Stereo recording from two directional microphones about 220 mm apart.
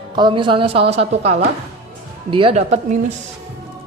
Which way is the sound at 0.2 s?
20° right (ahead or behind).